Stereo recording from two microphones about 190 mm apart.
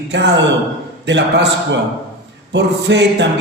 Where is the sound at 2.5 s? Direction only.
70° right (ahead or behind).